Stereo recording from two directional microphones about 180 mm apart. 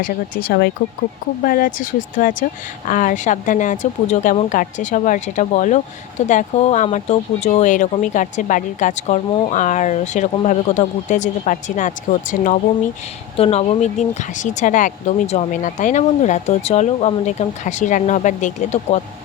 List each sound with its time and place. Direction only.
0.0 s speech: 55° left (ahead or behind)
13.3 s speech: 35° left (ahead or behind)